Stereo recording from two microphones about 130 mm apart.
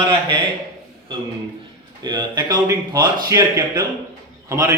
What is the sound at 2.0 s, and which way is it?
A man's voice, 30° right (ahead or behind).